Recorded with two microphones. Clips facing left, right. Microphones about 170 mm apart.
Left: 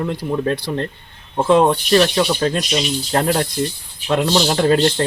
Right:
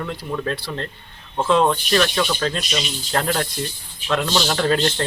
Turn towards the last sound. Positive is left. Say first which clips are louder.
# left 5 dB
turn(degrees=30)  # may be behind; listen again after turning